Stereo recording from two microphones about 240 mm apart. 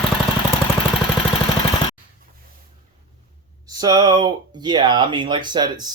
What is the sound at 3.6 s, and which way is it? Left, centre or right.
Speech, centre.